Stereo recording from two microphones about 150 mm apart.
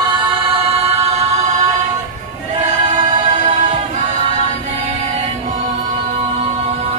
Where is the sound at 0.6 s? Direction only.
40° right (ahead or behind).